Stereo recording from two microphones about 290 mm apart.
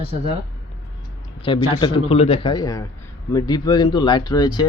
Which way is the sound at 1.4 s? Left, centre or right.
Centre.